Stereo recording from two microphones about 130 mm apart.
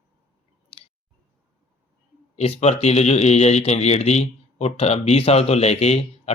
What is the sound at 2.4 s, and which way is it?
Speech, 55° left (ahead or behind).